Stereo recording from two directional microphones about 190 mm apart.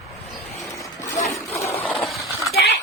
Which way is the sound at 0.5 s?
15° left (ahead or behind).